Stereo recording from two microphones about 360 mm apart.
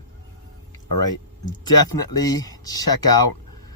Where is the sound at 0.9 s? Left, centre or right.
Left.